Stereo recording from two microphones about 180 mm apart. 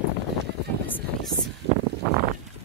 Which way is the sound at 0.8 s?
10° left (ahead or behind).